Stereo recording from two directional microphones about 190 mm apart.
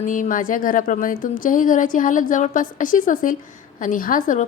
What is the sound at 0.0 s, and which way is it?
Speech, 45° left (ahead or behind).